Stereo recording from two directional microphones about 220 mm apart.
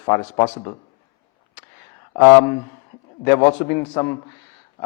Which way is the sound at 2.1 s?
15° left (ahead or behind).